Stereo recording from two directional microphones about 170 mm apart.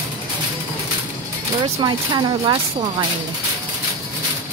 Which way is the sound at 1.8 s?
25° right (ahead or behind).